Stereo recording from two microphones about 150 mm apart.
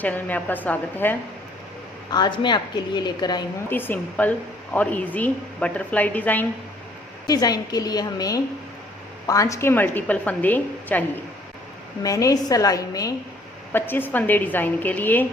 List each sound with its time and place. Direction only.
0.0 s a woman's voice: 10° left (ahead or behind)
2.0 s a woman's voice: 30° left (ahead or behind)
3.7 s a woman's voice: 15° left (ahead or behind)
7.3 s a woman's voice: 25° left (ahead or behind)
12.0 s a woman's voice: 20° left (ahead or behind)